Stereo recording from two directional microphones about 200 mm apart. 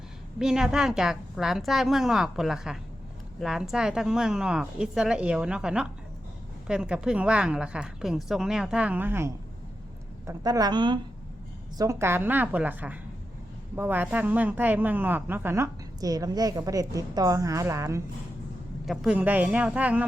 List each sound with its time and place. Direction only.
0.3 s a woman's voice: 5° right (ahead or behind)